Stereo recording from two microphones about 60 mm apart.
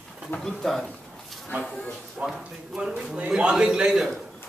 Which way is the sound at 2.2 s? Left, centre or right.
Right.